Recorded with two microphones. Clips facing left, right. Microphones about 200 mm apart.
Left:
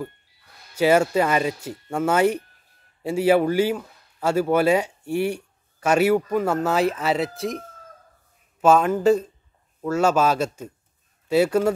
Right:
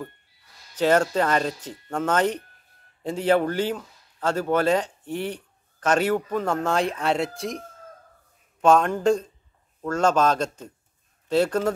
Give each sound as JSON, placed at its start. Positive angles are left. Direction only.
{"t": 0.7, "sound": "speech", "side_deg": 10}